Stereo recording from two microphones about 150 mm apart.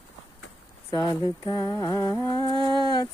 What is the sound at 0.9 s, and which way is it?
Humming, 30° left (ahead or behind).